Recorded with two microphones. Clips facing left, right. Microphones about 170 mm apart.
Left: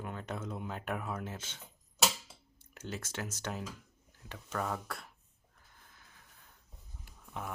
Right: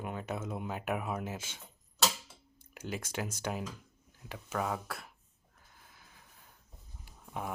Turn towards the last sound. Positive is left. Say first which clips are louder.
# right 3 dB
turn(degrees=-15)  # may be behind; listen again after turning